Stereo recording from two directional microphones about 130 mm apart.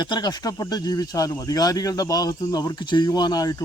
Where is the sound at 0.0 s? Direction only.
35° left (ahead or behind).